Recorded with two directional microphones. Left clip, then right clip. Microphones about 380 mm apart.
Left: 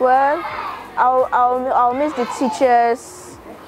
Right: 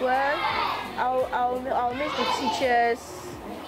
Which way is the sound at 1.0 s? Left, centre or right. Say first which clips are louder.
Left 11 dB; left.